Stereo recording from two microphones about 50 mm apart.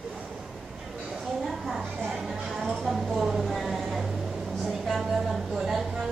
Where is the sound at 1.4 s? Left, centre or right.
Centre.